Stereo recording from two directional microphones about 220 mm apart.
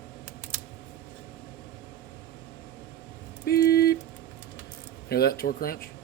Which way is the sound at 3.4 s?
45° left (ahead or behind).